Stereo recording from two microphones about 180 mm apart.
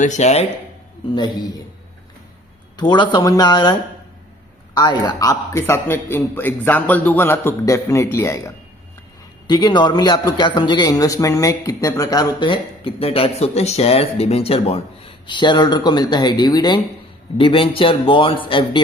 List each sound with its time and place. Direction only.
0.0 s speech: 40° left (ahead or behind)
1.1 s a man's voice: 25° left (ahead or behind)
2.7 s a man's voice: 25° left (ahead or behind)